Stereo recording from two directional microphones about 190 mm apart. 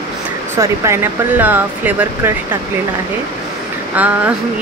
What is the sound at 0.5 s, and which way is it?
Speech, 15° right (ahead or behind).